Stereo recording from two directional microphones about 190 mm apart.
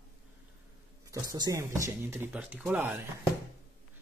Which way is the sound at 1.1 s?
20° right (ahead or behind).